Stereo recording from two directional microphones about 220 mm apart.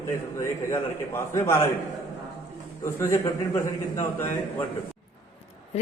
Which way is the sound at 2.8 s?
15° left (ahead or behind).